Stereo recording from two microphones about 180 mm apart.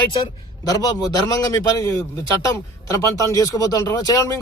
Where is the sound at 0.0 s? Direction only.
25° left (ahead or behind).